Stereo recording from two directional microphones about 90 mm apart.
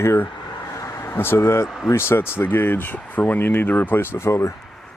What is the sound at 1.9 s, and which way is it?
Speech, 30° left (ahead or behind).